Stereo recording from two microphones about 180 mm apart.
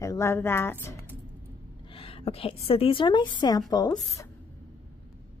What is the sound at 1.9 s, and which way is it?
A woman's voice, 30° left (ahead or behind).